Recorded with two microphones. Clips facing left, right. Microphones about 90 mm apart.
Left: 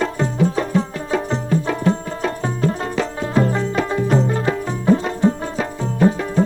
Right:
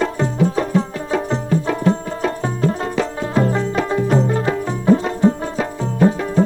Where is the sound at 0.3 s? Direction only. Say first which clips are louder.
Right 1 dB; 20° right (ahead or behind).